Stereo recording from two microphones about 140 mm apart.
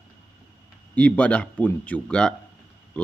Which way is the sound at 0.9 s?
10° left (ahead or behind).